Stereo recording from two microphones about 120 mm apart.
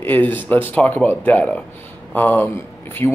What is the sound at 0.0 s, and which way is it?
A man's voice, 15° left (ahead or behind).